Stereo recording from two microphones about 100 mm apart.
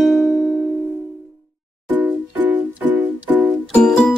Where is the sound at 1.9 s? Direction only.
15° right (ahead or behind).